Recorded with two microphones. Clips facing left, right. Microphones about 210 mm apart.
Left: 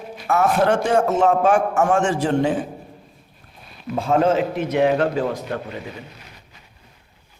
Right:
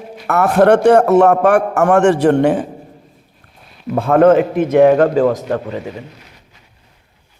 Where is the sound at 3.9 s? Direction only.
60° right (ahead or behind).